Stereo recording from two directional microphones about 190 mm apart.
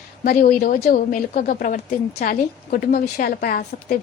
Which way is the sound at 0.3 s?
50° left (ahead or behind).